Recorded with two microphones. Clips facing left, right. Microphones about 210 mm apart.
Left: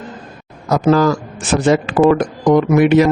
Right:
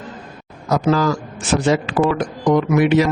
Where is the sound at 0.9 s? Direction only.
50° left (ahead or behind).